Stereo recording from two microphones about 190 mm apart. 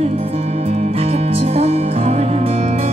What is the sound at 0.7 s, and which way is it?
Music, 30° right (ahead or behind).